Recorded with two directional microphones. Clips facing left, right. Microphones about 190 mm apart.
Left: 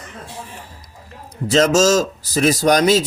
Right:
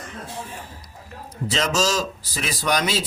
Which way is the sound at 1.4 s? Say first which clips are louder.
Left 9 dB; 45° left (ahead or behind).